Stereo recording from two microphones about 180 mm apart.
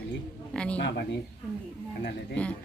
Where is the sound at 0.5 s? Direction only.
5° left (ahead or behind).